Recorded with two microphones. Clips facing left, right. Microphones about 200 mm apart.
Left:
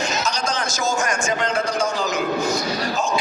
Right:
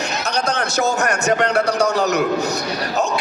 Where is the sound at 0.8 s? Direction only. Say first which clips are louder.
Right 4 dB; 65° right (ahead or behind).